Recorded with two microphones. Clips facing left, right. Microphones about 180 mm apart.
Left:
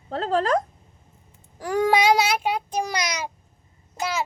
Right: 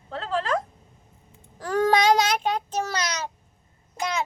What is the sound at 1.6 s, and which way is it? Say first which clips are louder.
Child singing: left 1 dB; 10° left (ahead or behind).